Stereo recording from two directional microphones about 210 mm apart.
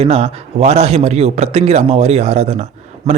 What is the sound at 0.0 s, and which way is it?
A man's voice, 30° right (ahead or behind).